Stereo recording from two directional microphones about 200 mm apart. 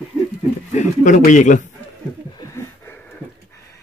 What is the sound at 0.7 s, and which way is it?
A man's voice, 40° left (ahead or behind).